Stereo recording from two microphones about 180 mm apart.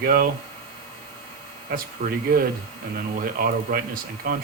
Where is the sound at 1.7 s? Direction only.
55° right (ahead or behind).